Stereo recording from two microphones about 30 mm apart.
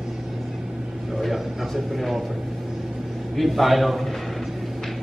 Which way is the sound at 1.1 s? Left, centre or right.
Centre.